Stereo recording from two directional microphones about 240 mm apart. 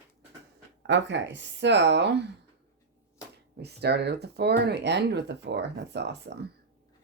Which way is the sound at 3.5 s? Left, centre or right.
Right.